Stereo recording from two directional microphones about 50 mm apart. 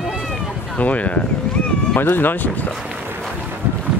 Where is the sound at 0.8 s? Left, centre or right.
Left.